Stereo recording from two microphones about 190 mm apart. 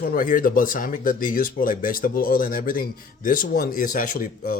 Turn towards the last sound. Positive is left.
turn(degrees=45)  # may be behind; listen again after turning